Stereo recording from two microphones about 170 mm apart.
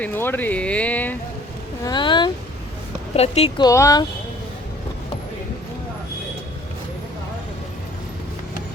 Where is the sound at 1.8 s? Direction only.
25° left (ahead or behind).